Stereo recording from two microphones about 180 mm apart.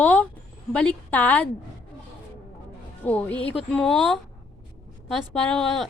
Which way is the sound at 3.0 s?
10° left (ahead or behind).